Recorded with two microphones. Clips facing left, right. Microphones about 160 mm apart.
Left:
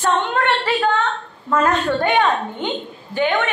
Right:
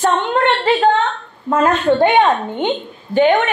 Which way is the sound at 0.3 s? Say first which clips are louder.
Right 4 dB; 25° right (ahead or behind).